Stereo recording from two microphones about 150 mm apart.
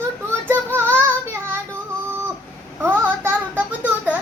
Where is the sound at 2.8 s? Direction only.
15° right (ahead or behind).